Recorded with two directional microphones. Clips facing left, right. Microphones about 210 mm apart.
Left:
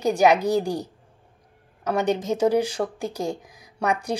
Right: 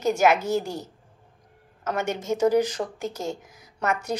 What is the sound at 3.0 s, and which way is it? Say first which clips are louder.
Speech: left 3 dB; 15° left (ahead or behind).